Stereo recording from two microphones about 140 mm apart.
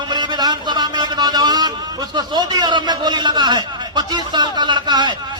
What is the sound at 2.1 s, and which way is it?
A man's voice, 30° right (ahead or behind).